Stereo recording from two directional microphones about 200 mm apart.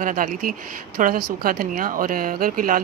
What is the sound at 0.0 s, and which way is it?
Speech, 40° right (ahead or behind).